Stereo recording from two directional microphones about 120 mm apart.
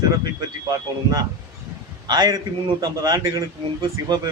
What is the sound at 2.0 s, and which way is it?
Speech, 35° right (ahead or behind).